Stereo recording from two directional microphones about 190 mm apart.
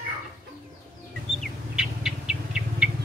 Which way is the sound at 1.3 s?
5° right (ahead or behind).